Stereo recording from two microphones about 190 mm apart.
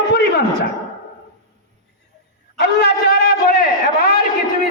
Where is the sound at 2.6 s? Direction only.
60° left (ahead or behind).